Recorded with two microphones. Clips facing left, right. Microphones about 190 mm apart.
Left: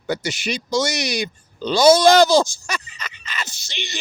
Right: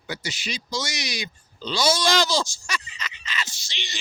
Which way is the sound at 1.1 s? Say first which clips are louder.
Left 9 dB; 55° left (ahead or behind).